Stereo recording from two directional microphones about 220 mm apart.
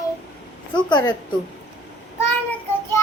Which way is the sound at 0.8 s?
20° left (ahead or behind).